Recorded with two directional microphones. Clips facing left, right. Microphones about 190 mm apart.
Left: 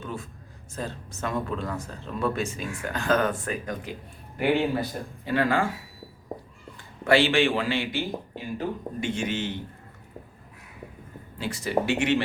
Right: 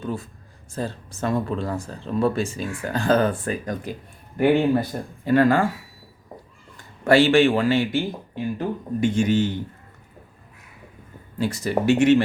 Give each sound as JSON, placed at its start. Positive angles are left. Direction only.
{"t": 0.0, "sound": "a sound", "side_deg": -35}
{"t": 0.7, "sound": "speech", "side_deg": -35}
{"t": 4.4, "sound": "speech", "side_deg": -50}
{"t": 6.7, "sound": "speech", "side_deg": -45}
{"t": 11.3, "sound": "speech", "side_deg": -40}